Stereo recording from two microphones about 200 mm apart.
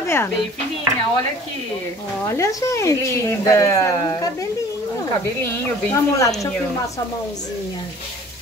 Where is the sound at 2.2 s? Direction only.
15° left (ahead or behind).